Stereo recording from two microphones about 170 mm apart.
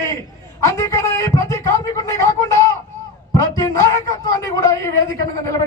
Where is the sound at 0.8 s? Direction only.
20° left (ahead or behind).